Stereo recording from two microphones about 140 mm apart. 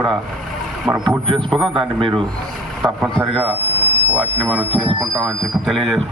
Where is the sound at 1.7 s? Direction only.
35° right (ahead or behind).